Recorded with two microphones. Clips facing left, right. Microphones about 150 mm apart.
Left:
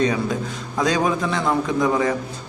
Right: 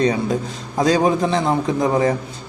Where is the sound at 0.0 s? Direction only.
30° right (ahead or behind).